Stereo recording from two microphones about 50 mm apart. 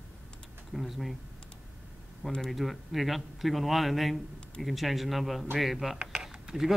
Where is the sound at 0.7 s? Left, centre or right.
Centre.